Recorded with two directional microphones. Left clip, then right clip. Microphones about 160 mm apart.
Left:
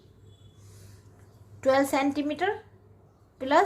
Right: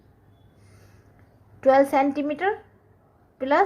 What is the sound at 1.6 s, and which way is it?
A woman's voice, 30° right (ahead or behind).